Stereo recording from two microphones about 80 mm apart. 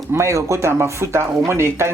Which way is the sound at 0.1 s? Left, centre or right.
Right.